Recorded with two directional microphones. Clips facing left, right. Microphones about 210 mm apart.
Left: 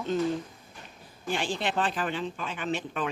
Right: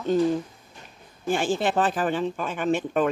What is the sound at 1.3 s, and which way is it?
Speech, 45° right (ahead or behind).